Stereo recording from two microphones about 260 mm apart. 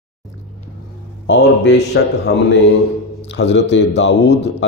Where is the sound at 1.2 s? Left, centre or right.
Left.